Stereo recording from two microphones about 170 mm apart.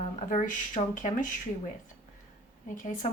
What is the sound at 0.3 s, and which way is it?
Speech, 50° left (ahead or behind).